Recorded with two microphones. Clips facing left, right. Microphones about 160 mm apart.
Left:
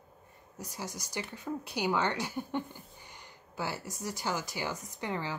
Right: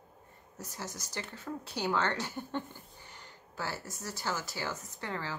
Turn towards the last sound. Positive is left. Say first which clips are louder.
# left 3 dB
turn(degrees=15)  # may be behind; listen again after turning